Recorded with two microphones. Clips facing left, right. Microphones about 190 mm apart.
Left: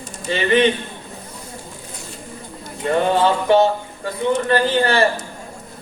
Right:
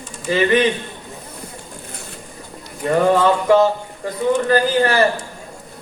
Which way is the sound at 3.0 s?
30° left (ahead or behind).